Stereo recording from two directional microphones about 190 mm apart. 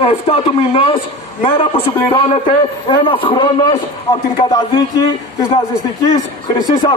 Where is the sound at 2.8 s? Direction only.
25° left (ahead or behind).